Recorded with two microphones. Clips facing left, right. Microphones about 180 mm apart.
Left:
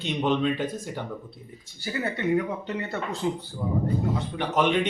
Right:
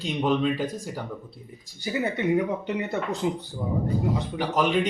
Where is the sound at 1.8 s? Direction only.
15° right (ahead or behind).